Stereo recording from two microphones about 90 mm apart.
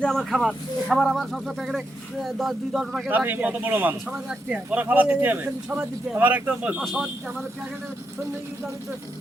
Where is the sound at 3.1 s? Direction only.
20° right (ahead or behind).